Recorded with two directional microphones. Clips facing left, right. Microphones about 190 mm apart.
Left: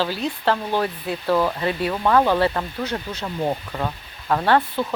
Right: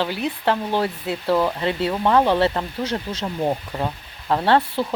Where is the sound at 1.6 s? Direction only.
20° right (ahead or behind).